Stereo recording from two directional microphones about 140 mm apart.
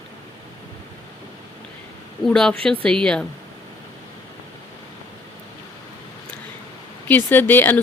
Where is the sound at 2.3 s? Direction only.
5° left (ahead or behind).